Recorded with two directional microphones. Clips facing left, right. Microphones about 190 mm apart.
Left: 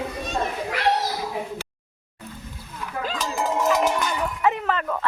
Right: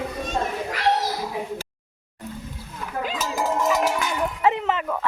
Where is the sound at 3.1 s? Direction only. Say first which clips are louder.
Even; 5° right (ahead or behind).